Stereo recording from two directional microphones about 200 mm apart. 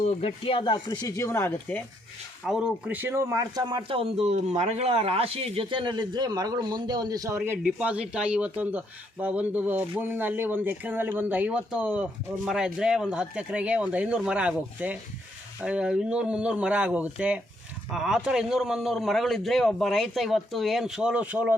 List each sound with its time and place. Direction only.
0.0 s speech: 30° left (ahead or behind); by 1.8 s 10° left (ahead or behind)
2.5 s a man's voice: 5° right (ahead or behind)